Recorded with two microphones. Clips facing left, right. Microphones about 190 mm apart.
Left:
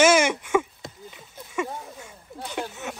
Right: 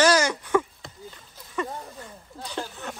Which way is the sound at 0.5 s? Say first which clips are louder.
Even; 15° left (ahead or behind).